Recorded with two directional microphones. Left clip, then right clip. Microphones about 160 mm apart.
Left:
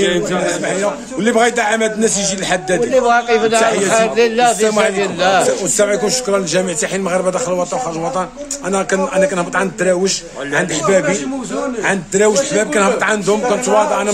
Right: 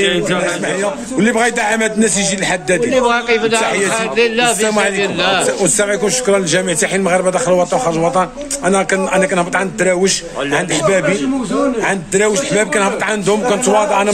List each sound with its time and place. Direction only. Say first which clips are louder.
1.2 s a man's voice: left 1 dB; 10° right (ahead or behind)
2.9 s a man's voice: left 2 dB; 35° left (ahead or behind)
4.6 s a man's voice: even; 10° right (ahead or behind)